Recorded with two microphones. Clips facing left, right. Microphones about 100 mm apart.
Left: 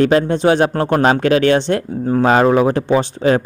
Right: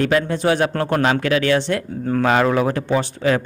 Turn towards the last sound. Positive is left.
turn(degrees=30)  # may be behind; listen again after turning